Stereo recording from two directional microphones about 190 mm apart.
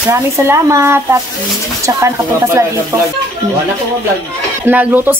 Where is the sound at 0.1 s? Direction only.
15° right (ahead or behind).